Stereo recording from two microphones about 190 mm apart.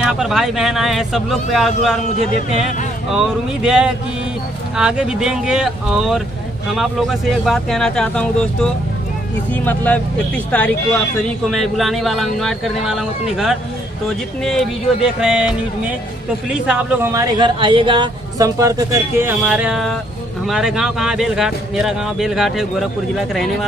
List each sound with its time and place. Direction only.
0.0 s speech: centre (ahead or behind)
16.4 s speech: 5° right (ahead or behind)